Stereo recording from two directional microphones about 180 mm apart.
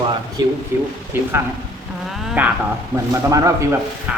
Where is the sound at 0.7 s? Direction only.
10° right (ahead or behind).